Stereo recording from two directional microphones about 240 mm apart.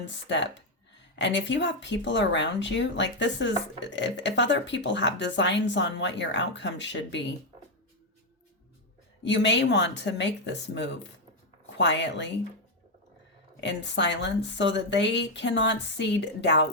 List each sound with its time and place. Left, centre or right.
0.0 s speech: left
9.2 s speech: left
13.6 s speech: left